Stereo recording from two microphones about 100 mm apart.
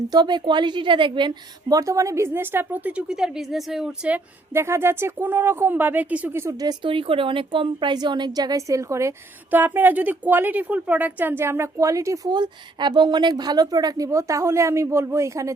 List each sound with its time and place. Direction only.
0.1 s a woman's voice: 45° right (ahead or behind)
1.7 s a woman's voice: 35° right (ahead or behind); by 4.2 s 10° right (ahead or behind)
4.5 s a woman's voice: 25° right (ahead or behind)
6.5 s speech: 40° right (ahead or behind)
6.8 s a woman's voice: 60° right (ahead or behind); by 9.1 s 30° right (ahead or behind)
9.5 s a woman's voice: 20° right (ahead or behind)